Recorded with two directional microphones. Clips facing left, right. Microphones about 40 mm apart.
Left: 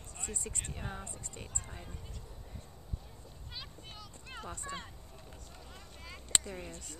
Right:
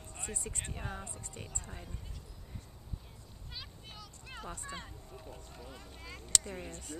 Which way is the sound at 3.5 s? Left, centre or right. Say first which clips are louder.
Even; centre.